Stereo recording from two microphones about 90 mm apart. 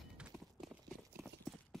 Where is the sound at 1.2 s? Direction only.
30° right (ahead or behind).